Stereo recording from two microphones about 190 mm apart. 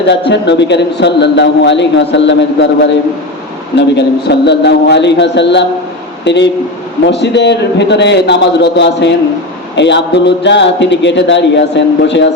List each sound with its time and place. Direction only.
0.1 s a man's voice: 65° left (ahead or behind)